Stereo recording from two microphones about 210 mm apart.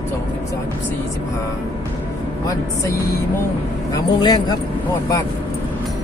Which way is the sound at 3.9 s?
20° left (ahead or behind).